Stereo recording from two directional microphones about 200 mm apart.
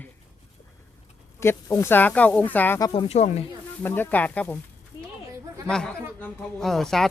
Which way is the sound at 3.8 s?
10° left (ahead or behind).